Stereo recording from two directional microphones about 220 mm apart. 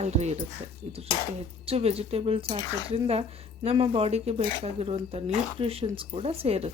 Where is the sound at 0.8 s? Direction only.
90° right.